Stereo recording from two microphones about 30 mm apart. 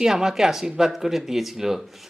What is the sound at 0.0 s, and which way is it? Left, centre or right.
Speech, centre.